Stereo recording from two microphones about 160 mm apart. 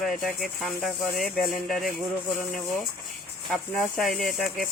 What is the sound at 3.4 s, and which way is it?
Speech, centre (ahead or behind).